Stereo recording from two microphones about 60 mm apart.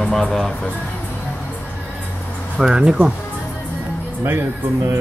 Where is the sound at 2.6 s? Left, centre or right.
Centre.